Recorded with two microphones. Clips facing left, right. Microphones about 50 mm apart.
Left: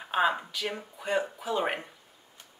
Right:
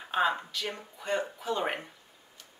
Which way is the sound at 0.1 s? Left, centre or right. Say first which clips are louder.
Left 1 dB; centre.